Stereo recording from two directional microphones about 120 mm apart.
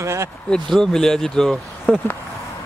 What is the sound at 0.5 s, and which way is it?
Speech, 5° left (ahead or behind).